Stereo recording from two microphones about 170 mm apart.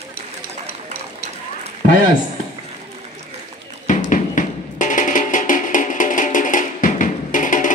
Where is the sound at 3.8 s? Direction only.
50° left (ahead or behind).